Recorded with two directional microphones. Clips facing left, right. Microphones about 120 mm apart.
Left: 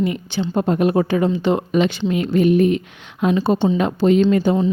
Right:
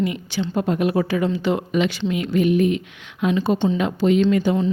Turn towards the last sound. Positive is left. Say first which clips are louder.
# left 2 dB
turn(degrees=35)  # may be behind; listen again after turning